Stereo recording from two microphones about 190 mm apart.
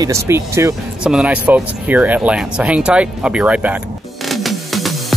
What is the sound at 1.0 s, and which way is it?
Music, 5° right (ahead or behind).